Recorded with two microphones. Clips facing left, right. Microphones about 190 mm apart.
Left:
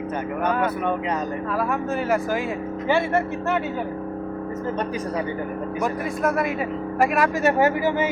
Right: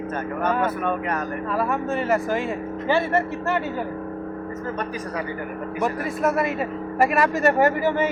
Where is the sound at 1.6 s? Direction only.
Centre (ahead or behind).